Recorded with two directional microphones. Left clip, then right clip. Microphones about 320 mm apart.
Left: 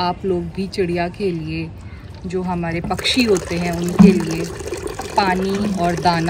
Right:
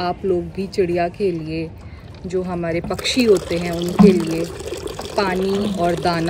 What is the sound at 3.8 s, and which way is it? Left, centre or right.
Speech, right.